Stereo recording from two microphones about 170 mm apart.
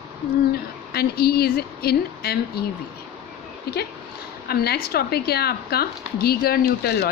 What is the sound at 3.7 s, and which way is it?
A woman's voice, 70° left (ahead or behind).